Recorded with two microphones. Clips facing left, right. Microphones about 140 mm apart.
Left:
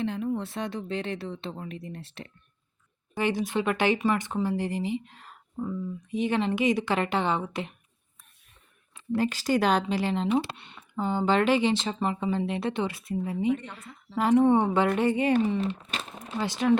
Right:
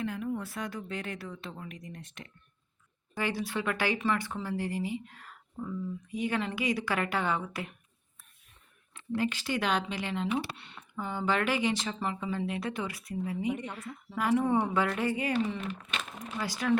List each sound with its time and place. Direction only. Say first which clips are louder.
0.0 s speech: left 4 dB; 25° left (ahead or behind)
3.2 s speech: left 6 dB; 20° left (ahead or behind)
9.1 s speech: left 6 dB; 35° left (ahead or behind)
13.5 s speech: left 6 dB; 15° right (ahead or behind)
14.4 s speech: left 6 dB; 25° left (ahead or behind)
15.3 s speech: left 7 dB; 40° left (ahead or behind)